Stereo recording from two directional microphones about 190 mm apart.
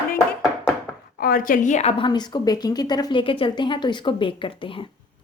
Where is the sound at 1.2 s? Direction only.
50° left (ahead or behind); by 4.8 s 25° left (ahead or behind).